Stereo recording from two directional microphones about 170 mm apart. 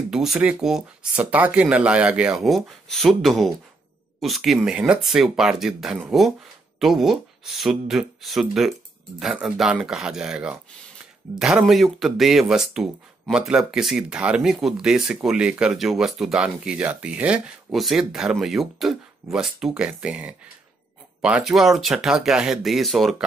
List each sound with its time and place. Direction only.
0.1 s speech: 5° right (ahead or behind)